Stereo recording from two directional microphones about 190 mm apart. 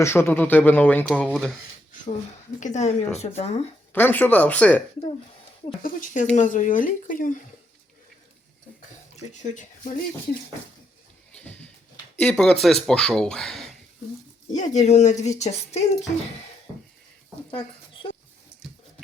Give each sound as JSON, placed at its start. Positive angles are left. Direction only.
{"t": 0.0, "sound": "speech", "side_deg": 10}
{"t": 2.6, "sound": "a child's voice", "side_deg": 40}
{"t": 3.9, "sound": "speech", "side_deg": 10}
{"t": 5.8, "sound": "speech", "side_deg": 45}
{"t": 9.1, "sound": "a child's voice", "side_deg": 40}
{"t": 11.3, "sound": "a sound", "side_deg": 5}
{"t": 12.2, "sound": "speech", "side_deg": 5}
{"t": 14.5, "sound": "a child's voice", "side_deg": 40}